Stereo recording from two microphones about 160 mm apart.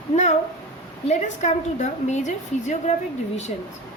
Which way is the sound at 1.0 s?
45° left (ahead or behind).